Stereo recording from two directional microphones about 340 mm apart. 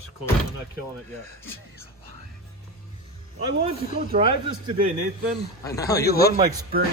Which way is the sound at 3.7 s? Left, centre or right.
Centre.